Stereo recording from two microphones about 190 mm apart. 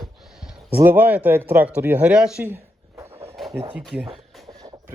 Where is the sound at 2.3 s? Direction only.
10° right (ahead or behind).